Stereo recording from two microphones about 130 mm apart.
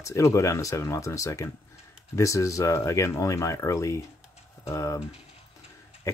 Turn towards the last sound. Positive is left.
turn(degrees=20)  # may be behind; listen again after turning